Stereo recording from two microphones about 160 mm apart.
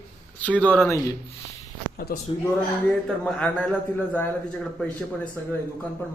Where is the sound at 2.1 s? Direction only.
65° left (ahead or behind).